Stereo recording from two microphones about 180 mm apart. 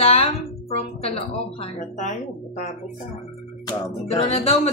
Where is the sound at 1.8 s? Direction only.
45° left (ahead or behind).